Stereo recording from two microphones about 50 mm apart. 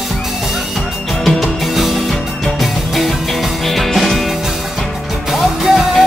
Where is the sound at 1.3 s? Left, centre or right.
Centre.